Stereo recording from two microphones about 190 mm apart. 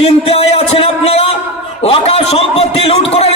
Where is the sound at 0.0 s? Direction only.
30° left (ahead or behind).